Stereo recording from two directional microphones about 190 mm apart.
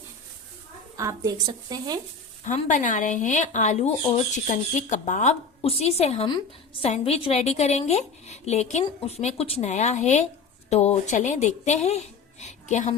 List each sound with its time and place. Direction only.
0.9 s a woman's voice: 15° right (ahead or behind)
2.5 s a woman's voice: 40° left (ahead or behind)